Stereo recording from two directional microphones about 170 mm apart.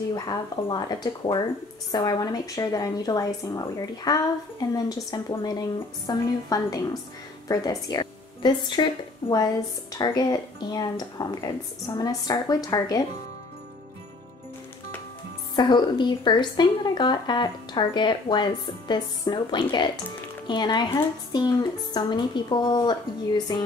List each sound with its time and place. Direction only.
0.1 s a woman's voice: 25° left (ahead or behind)
9.9 s speech: 25° left (ahead or behind)
15.5 s speech: 25° left (ahead or behind)